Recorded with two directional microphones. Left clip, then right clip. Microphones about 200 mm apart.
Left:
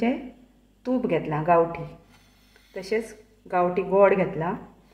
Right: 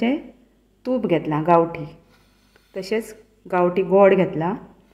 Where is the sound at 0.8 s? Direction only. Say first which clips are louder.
Right 4 dB; 35° right (ahead or behind).